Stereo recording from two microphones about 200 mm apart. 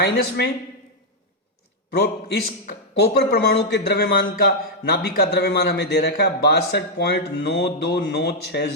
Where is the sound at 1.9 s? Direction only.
55° left (ahead or behind).